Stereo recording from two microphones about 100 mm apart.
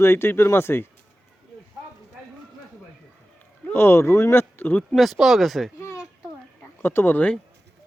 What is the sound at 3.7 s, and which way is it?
Speech, 25° left (ahead or behind).